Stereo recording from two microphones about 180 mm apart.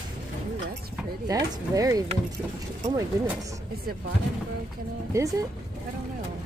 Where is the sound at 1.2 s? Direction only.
20° right (ahead or behind).